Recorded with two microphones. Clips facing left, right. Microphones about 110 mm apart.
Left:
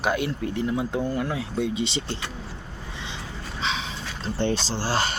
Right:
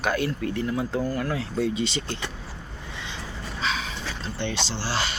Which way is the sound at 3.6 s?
20° left (ahead or behind).